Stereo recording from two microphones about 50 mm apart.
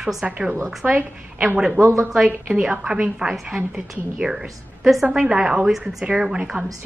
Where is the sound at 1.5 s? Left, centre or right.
Centre.